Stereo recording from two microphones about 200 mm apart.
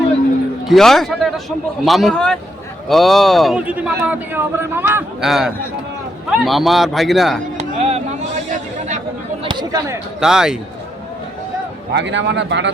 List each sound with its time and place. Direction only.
0.7 s a man's voice: centre (ahead or behind)
7.6 s a sound: 30° right (ahead or behind)
9.4 s chatter: 20° right (ahead or behind)
10.2 s a man's voice: 5° right (ahead or behind)
11.9 s speech: 60° right (ahead or behind)